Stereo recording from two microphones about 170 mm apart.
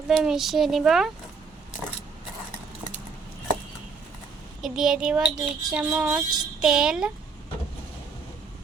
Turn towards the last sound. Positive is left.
turn(degrees=-5)  # may be behind; listen again after turning